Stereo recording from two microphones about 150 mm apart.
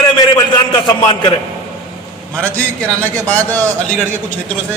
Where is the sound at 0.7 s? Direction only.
30° left (ahead or behind).